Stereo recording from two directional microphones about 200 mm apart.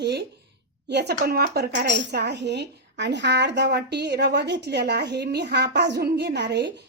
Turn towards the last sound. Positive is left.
turn(degrees=-60)  # may be behind; listen again after turning